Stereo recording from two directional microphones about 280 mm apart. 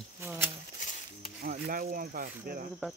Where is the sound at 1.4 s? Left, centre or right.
Right.